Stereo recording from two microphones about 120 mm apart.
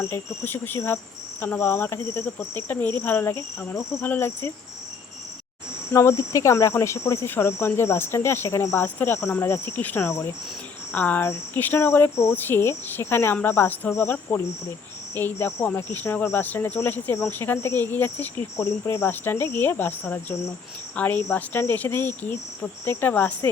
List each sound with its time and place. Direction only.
0.0 s cricket: 20° left (ahead or behind)
5.9 s cricket: 25° left (ahead or behind)